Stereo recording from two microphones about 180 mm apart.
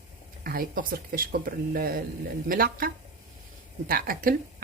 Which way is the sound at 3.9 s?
50° right (ahead or behind).